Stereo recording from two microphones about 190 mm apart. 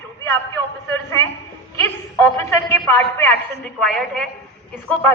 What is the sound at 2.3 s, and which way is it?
A woman's voice, 15° left (ahead or behind).